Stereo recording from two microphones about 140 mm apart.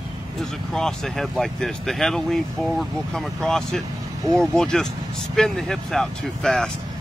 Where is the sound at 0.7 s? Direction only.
5° left (ahead or behind).